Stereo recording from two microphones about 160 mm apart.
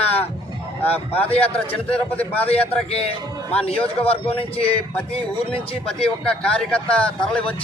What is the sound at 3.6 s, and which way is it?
A man's voice, 35° left (ahead or behind).